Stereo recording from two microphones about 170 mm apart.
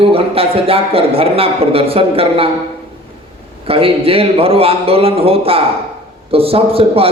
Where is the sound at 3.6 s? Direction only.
35° right (ahead or behind).